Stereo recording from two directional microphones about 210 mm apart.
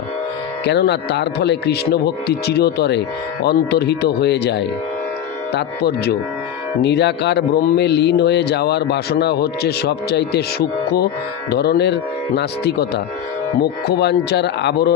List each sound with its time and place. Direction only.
0.7 s a man's voice: 55° left (ahead or behind)